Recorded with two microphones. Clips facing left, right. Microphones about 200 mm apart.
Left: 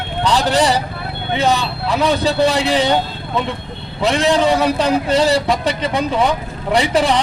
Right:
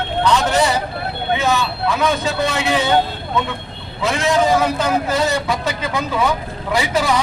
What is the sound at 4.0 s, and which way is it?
A man's voice, 35° left (ahead or behind).